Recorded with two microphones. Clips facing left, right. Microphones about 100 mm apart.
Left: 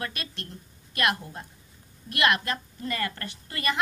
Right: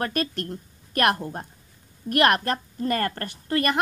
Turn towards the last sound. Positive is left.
turn(degrees=-55)  # may be behind; listen again after turning